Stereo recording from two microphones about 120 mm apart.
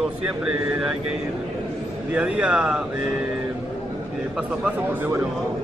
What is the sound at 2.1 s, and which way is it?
Speech, 10° right (ahead or behind).